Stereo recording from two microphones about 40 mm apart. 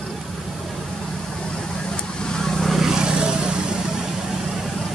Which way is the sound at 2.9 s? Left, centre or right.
Right.